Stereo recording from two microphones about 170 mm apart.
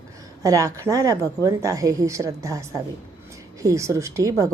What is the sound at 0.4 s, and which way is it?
A woman's voice, 20° right (ahead or behind).